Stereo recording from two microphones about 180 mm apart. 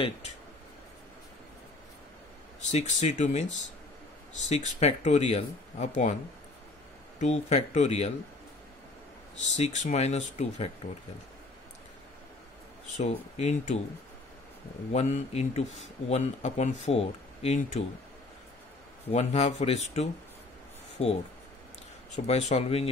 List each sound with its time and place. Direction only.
2.6 s speech: 40° left (ahead or behind)
4.5 s speech: 40° left (ahead or behind)
7.2 s speech: 40° left (ahead or behind)
9.4 s speech: 40° left (ahead or behind)
13.0 s speech: 40° left (ahead or behind)
14.9 s speech: 40° left (ahead or behind)
19.0 s speech: 35° left (ahead or behind)